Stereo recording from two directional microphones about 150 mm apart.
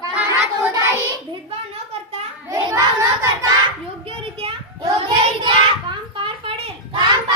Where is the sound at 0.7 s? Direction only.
20° right (ahead or behind).